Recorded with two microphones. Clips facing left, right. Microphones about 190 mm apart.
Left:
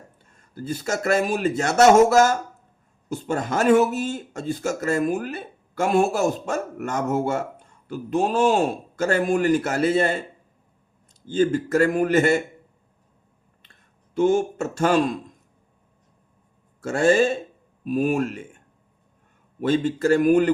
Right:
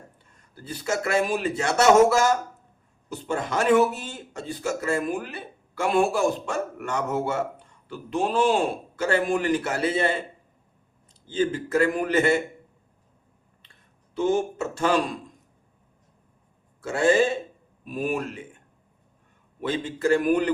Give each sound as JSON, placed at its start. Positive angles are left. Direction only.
{"t": 0.5, "sound": "speech", "side_deg": 45}
{"t": 11.3, "sound": "speech", "side_deg": 45}
{"t": 14.2, "sound": "speech", "side_deg": 45}
{"t": 16.8, "sound": "speech", "side_deg": 45}
{"t": 19.6, "sound": "speech", "side_deg": 45}